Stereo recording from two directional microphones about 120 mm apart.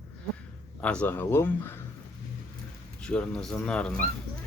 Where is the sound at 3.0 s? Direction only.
10° left (ahead or behind).